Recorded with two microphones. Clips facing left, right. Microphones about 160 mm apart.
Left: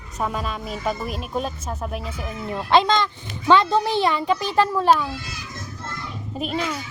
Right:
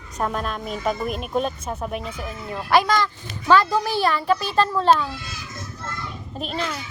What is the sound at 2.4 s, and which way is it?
A child's voice, 20° left (ahead or behind).